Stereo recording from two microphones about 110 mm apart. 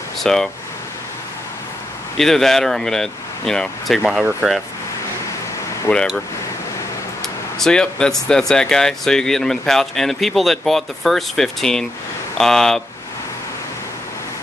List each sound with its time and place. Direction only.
0.2 s speech: 5° left (ahead or behind)
2.1 s speech: 5° left (ahead or behind)
5.9 s speech: 20° left (ahead or behind)
7.5 s speech: 5° left (ahead or behind)